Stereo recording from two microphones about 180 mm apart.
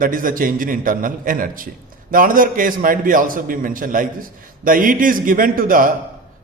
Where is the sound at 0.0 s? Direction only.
50° right (ahead or behind).